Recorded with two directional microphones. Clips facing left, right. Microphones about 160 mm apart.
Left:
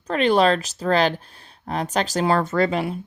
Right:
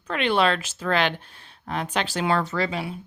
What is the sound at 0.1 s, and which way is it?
A woman's voice, 40° left (ahead or behind).